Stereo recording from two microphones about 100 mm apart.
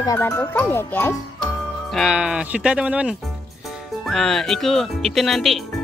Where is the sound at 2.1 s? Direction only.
10° right (ahead or behind).